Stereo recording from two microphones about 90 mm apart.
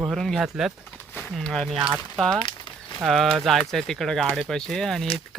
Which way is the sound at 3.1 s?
Centre (ahead or behind).